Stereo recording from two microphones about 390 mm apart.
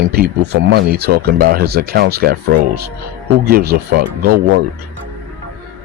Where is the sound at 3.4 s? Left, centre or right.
Right.